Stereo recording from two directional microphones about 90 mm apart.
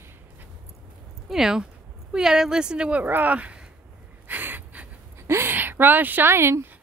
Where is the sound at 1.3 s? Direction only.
5° right (ahead or behind).